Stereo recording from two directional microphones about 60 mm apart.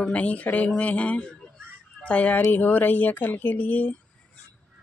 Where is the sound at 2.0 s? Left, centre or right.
Left.